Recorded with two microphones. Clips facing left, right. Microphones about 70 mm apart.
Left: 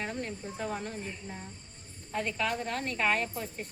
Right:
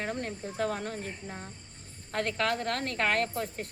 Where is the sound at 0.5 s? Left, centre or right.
Right.